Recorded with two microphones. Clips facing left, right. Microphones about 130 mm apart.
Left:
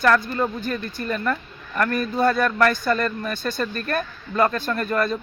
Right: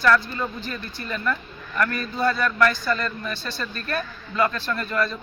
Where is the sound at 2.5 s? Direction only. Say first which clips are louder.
Left 1 dB; 35° left (ahead or behind).